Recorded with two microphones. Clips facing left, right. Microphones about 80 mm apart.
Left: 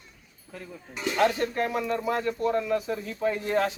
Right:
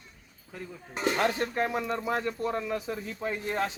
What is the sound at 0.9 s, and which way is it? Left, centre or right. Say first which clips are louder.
Speech: right 2 dB; right.